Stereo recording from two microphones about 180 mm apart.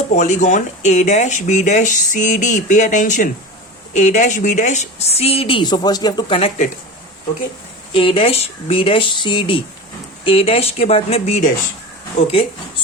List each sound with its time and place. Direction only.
0.1 s a woman's voice: 40° left (ahead or behind)
7.9 s a woman's voice: 30° left (ahead or behind)